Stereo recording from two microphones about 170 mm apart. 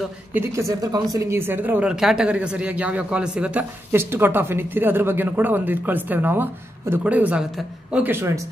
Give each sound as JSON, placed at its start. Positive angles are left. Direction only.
{"t": 0.3, "sound": "speech", "side_deg": -15}